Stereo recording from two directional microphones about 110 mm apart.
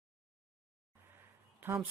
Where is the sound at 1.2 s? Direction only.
20° right (ahead or behind).